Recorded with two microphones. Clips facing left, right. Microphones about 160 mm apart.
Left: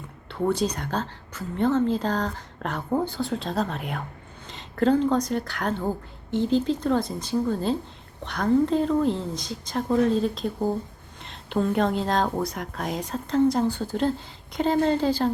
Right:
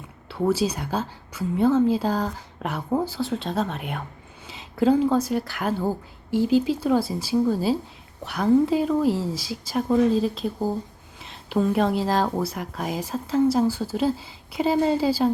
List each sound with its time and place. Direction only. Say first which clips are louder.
0.3 s a woman's voice: right 2 dB; 5° right (ahead or behind)